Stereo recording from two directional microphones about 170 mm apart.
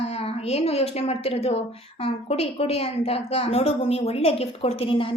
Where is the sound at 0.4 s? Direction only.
40° left (ahead or behind).